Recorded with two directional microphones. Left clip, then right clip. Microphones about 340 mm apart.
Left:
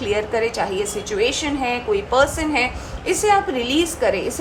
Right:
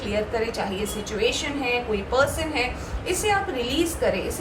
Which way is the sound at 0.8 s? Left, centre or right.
Left.